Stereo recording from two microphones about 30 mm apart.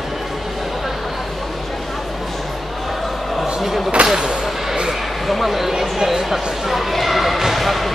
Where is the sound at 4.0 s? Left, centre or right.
Right.